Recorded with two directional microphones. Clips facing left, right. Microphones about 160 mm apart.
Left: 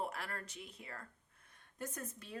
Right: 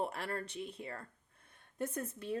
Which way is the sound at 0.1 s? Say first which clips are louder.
Right 6 dB; 30° right (ahead or behind).